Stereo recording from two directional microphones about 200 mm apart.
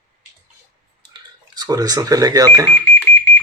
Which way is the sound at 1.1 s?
20° right (ahead or behind).